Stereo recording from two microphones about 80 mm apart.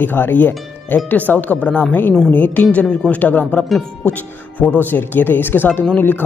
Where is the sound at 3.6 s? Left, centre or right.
Centre.